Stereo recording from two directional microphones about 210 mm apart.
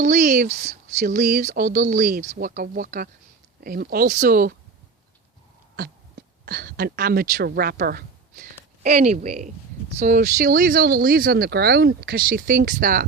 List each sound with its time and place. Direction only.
0.0 s speech: 35° right (ahead or behind)
5.7 s speech: 45° right (ahead or behind)